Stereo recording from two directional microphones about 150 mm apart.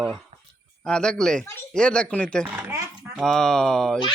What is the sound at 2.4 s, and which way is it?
Speech, 20° right (ahead or behind).